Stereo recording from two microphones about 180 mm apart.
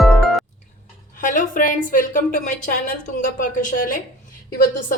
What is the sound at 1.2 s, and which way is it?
A woman's voice, 45° left (ahead or behind).